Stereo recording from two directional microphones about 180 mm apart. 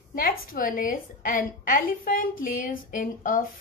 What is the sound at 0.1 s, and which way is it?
A woman's voice, 50° left (ahead or behind).